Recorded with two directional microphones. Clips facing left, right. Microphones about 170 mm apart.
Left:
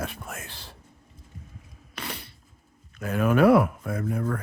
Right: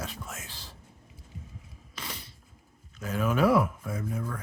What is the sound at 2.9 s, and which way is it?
Speech, 60° left (ahead or behind).